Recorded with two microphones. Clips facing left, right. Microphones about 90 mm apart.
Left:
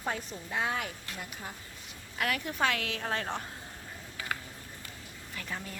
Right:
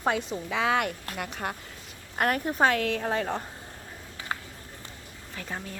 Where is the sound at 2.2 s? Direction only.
45° right (ahead or behind).